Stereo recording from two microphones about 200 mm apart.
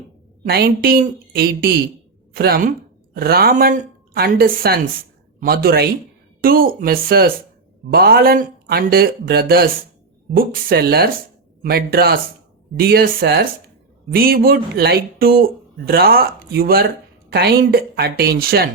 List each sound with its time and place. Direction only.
0.4 s a man's voice: 50° right (ahead or behind)